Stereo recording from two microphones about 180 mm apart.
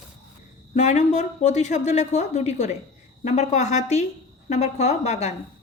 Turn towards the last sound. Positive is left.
turn(degrees=40)  # may be behind; listen again after turning